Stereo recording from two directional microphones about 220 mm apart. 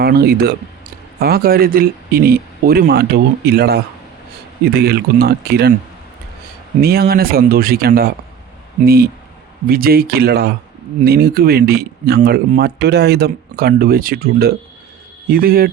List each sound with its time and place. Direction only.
0.0 s speech: 45° right (ahead or behind)
6.8 s speech: 45° right (ahead or behind)